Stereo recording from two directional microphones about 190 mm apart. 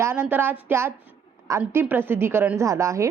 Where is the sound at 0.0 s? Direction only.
10° right (ahead or behind).